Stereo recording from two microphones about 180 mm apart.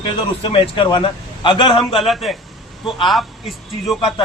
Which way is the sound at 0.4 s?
30° left (ahead or behind).